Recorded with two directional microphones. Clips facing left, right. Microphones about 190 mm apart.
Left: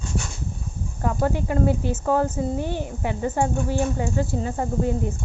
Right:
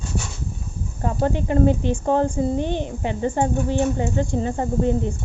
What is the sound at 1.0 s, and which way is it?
Speech, 25° right (ahead or behind).